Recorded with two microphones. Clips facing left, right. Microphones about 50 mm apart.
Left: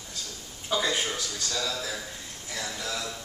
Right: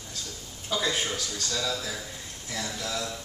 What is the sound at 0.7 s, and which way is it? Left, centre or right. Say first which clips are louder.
A man's voice: left 1 dB; centre.